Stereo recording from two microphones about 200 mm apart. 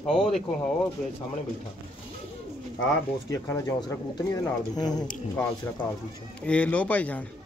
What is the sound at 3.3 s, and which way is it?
Speech, 15° left (ahead or behind).